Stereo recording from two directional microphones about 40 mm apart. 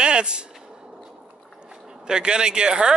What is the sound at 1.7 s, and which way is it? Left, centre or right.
Speech, centre.